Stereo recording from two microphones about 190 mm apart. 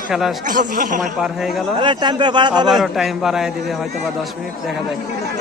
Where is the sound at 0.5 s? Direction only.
45° right (ahead or behind).